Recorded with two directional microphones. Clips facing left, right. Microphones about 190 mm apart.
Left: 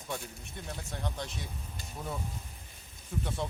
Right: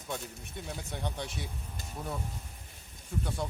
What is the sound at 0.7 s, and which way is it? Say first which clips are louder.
Speech: right 1 dB; 10° right (ahead or behind).